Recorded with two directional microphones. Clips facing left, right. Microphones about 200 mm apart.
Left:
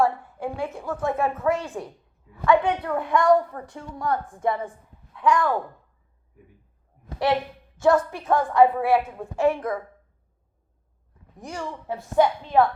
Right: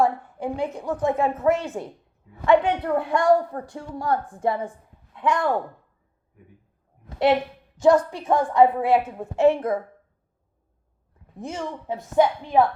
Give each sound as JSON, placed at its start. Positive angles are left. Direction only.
{"t": 0.0, "sound": "a woman's voice", "side_deg": -15}
{"t": 7.8, "sound": "a woman's voice", "side_deg": -15}
{"t": 11.3, "sound": "a woman's voice", "side_deg": -20}